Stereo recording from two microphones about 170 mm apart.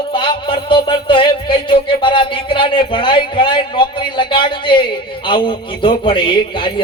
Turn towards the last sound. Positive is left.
turn(degrees=30)  # may be behind; listen again after turning